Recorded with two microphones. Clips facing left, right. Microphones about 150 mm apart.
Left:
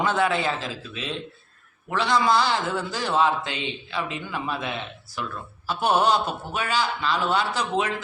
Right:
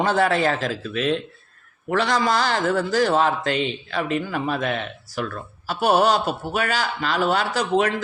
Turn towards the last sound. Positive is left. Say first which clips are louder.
# right 4 dB
turn(degrees=-45)  # may be behind; listen again after turning